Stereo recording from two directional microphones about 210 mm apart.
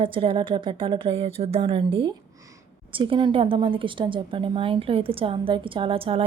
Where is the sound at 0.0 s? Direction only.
25° right (ahead or behind).